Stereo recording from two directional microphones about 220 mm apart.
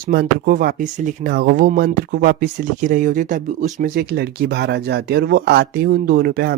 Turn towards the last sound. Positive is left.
turn(degrees=-45)  # may be behind; listen again after turning